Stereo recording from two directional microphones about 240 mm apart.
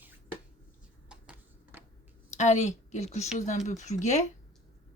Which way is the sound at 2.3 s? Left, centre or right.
Left.